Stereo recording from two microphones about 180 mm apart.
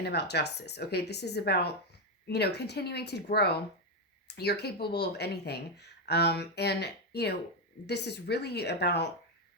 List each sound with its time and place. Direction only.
0.0 s a woman's voice: 65° left (ahead or behind)